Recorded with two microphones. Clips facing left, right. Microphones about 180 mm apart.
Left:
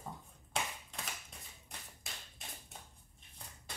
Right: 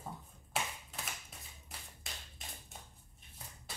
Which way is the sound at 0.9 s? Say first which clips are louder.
Right 1 dB; 5° right (ahead or behind).